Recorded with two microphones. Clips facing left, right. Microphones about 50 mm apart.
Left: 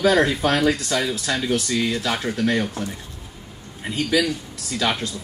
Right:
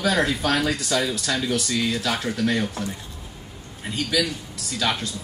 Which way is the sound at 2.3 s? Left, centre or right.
Left.